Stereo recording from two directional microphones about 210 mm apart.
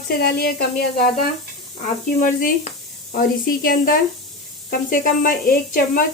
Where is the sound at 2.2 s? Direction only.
40° left (ahead or behind).